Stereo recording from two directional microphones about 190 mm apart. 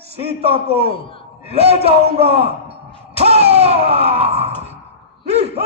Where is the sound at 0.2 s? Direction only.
30° right (ahead or behind).